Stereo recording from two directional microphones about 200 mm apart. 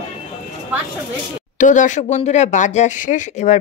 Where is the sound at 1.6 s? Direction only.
40° left (ahead or behind).